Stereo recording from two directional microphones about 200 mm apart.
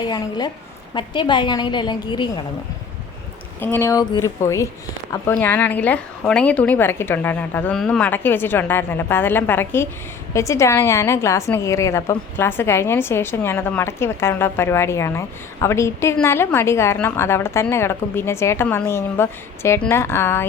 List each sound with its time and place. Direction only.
0.0 s a woman's voice: 20° left (ahead or behind)
3.6 s a woman's voice: 10° left (ahead or behind)